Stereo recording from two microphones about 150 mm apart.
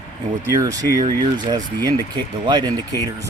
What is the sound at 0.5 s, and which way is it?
Speech, 25° right (ahead or behind).